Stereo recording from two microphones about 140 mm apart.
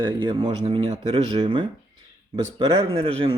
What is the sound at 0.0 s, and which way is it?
A man's voice, 35° right (ahead or behind).